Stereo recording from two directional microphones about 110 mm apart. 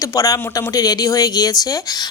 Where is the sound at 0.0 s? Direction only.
30° left (ahead or behind).